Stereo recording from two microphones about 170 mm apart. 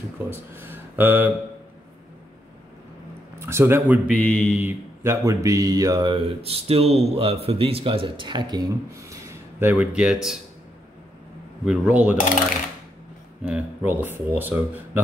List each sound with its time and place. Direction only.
0.6 s speech: 10° right (ahead or behind)
3.3 s speech: 15° right (ahead or behind)
4.2 s mantra: 10° left (ahead or behind)
4.6 s speech: 15° right (ahead or behind)
11.6 s speech: 5° right (ahead or behind)
13.4 s speech: 5° right (ahead or behind)